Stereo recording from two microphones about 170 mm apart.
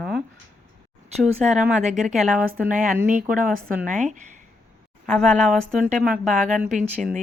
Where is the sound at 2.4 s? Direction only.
60° right (ahead or behind).